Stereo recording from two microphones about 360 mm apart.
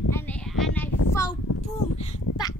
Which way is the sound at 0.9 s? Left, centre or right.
Left.